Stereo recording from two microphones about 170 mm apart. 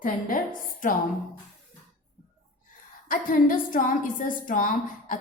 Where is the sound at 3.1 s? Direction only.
50° left (ahead or behind).